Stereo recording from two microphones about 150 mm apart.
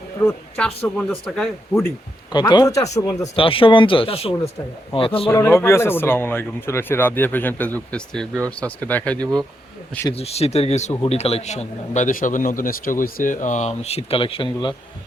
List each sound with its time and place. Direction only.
0.3 s speech: 10° left (ahead or behind)
2.3 s speech: 30° left (ahead or behind)
3.3 s speech: 35° left (ahead or behind)
5.3 s speech: 15° left (ahead or behind)
10.2 s a man's voice: 45° left (ahead or behind)